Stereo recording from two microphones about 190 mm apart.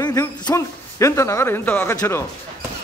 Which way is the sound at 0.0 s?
20° left (ahead or behind).